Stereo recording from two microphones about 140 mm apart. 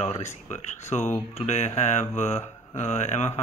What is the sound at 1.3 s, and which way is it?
Speech, 55° left (ahead or behind).